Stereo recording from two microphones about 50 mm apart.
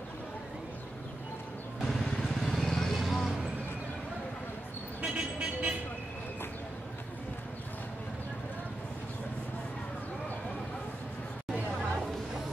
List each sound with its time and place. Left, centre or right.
1.8 s vehicle: centre
5.0 s vehicle: right